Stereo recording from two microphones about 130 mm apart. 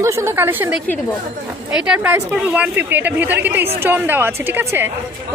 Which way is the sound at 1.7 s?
5° right (ahead or behind).